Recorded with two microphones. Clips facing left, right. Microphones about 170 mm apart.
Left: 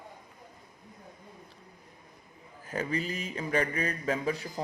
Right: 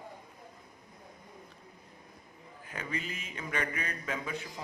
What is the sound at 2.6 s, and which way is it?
Speech, 35° left (ahead or behind).